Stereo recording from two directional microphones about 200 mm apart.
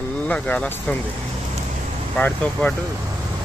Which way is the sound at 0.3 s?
5° left (ahead or behind).